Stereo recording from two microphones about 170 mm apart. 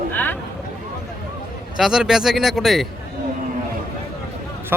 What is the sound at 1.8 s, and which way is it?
A man's voice, 5° right (ahead or behind).